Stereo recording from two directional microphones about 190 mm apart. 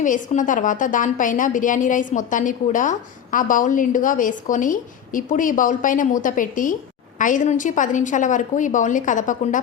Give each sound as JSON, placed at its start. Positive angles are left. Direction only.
{"t": 0.0, "sound": "a woman's voice", "side_deg": 40}